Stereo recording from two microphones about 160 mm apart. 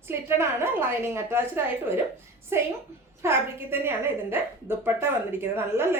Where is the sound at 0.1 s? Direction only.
15° right (ahead or behind).